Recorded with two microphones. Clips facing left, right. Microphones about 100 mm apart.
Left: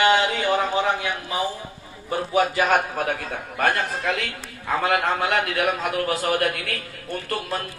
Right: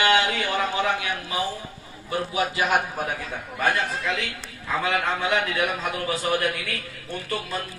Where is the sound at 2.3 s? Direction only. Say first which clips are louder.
Left 4 dB; 50° left (ahead or behind).